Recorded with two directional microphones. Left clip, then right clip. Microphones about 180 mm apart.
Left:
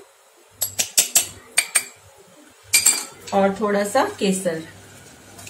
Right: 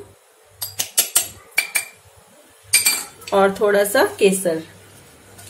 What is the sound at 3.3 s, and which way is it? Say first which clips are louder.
Speech: right 4 dB; 60° right (ahead or behind).